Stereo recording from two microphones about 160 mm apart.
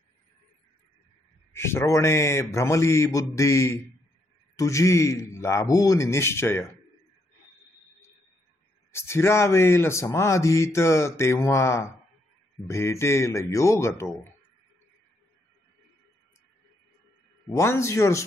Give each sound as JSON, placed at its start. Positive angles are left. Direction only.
{"t": 1.5, "sound": "speech", "side_deg": 15}
{"t": 8.9, "sound": "speech", "side_deg": 15}
{"t": 17.6, "sound": "speech", "side_deg": 15}